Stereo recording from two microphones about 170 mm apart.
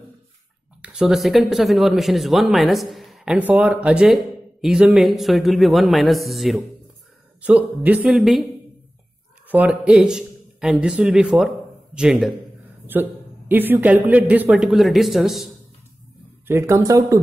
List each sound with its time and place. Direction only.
0.8 s a man's voice: 5° right (ahead or behind)
9.5 s a man's voice: 10° right (ahead or behind)
12.8 s a man's voice: 10° right (ahead or behind)
16.4 s a man's voice: 15° right (ahead or behind)